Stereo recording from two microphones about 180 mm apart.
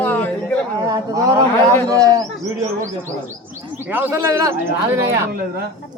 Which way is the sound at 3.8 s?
10° right (ahead or behind).